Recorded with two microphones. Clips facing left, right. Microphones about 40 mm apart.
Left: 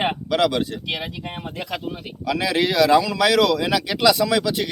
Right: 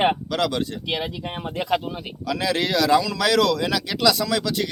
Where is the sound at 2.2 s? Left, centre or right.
Centre.